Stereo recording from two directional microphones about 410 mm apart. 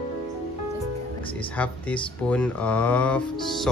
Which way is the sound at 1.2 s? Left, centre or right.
Centre.